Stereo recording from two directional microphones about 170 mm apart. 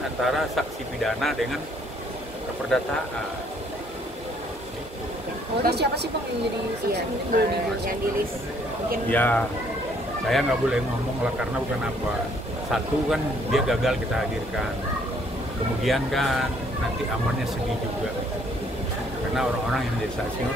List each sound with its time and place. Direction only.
0.2 s speech: centre (ahead or behind)
2.7 s speech: 5° left (ahead or behind)
5.6 s speech: 75° right (ahead or behind)
6.9 s speech: 65° right (ahead or behind)
9.1 s speech: 10° left (ahead or behind)
12.7 s speech: centre (ahead or behind)
15.8 s speech: centre (ahead or behind)